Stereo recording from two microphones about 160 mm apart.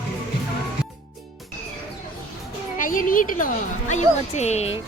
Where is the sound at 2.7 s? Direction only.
55° left (ahead or behind).